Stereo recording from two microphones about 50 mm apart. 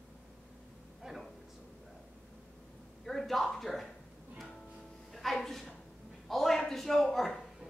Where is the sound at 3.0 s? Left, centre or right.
Centre.